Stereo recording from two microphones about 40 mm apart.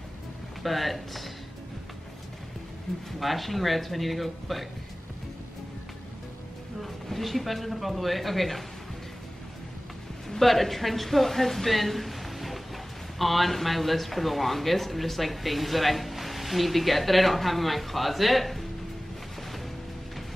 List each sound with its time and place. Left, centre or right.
0.7 s speech: centre
3.1 s speech: centre
6.8 s speech: centre
10.3 s speech: centre